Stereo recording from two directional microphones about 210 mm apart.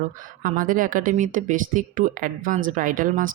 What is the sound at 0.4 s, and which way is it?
Speech, 40° right (ahead or behind).